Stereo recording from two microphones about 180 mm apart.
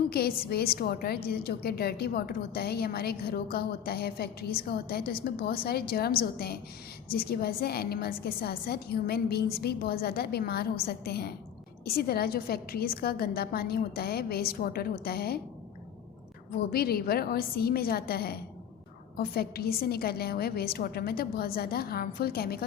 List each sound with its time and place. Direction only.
0.1 s a woman's voice: 60° left (ahead or behind)
16.6 s a woman's voice: 60° left (ahead or behind)